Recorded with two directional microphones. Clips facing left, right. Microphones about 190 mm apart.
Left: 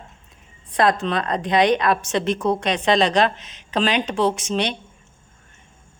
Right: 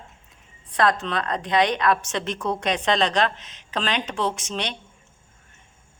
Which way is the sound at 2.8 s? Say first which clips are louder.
Left 5 dB; 10° left (ahead or behind).